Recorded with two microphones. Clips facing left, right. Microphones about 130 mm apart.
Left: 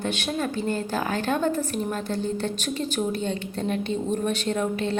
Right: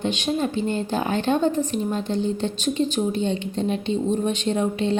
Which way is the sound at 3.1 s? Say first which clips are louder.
Right 4 dB; 45° left (ahead or behind).